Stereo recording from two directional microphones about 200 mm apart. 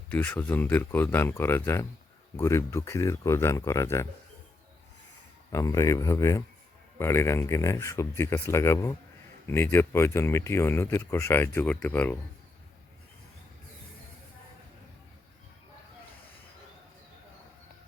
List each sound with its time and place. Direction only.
0.1 s speech: 10° left (ahead or behind)
5.5 s speech: 15° left (ahead or behind)